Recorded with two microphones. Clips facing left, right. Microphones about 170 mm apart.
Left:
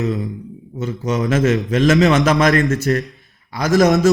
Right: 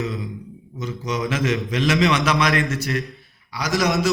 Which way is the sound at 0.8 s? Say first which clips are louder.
Left 5 dB; 45° left (ahead or behind).